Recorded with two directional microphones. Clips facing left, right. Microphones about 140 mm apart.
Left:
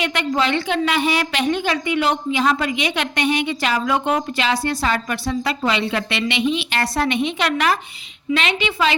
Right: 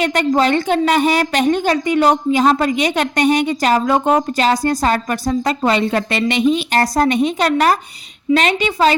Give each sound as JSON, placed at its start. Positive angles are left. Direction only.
{"t": 0.0, "sound": "a woman's voice", "side_deg": -45}